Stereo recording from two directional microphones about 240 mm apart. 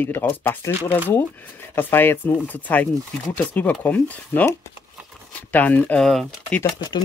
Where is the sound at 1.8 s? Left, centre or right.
Centre.